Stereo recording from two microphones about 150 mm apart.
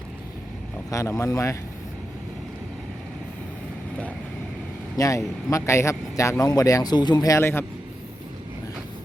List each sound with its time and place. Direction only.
0.9 s a man's voice: 20° left (ahead or behind)
4.9 s a man's voice: 20° left (ahead or behind)